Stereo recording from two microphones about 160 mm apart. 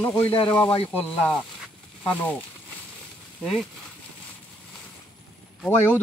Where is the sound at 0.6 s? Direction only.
35° left (ahead or behind).